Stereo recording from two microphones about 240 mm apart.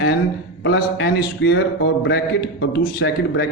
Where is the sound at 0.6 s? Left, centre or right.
Left.